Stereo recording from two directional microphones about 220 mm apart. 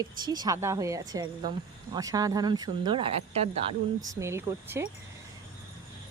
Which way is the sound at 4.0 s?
15° right (ahead or behind).